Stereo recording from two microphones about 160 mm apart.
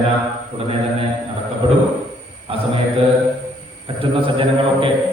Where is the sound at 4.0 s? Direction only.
35° right (ahead or behind).